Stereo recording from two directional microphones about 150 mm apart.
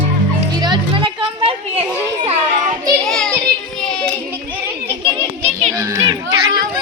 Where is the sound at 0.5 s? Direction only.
30° right (ahead or behind).